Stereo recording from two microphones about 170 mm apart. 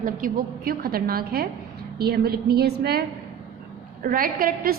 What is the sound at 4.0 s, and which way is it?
Speech, 55° right (ahead or behind).